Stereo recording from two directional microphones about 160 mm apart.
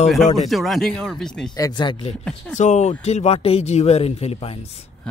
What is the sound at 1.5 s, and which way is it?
Speech, 25° left (ahead or behind).